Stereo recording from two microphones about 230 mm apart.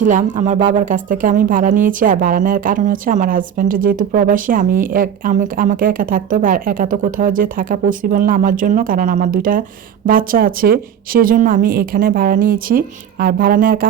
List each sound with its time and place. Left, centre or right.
0.0 s a woman's voice: right